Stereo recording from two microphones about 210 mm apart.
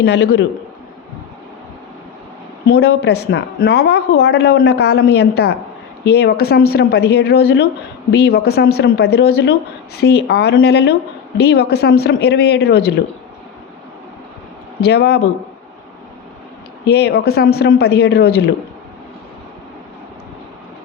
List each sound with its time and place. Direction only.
0.0 s a man's voice: 50° left (ahead or behind)
2.6 s speech: 50° left (ahead or behind)
14.8 s speech: 50° left (ahead or behind)
16.8 s speech: 50° left (ahead or behind)